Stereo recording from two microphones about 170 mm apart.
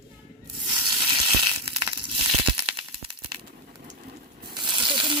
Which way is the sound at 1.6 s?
30° right (ahead or behind).